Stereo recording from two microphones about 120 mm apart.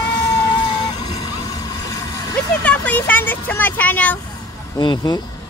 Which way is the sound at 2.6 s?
10° left (ahead or behind).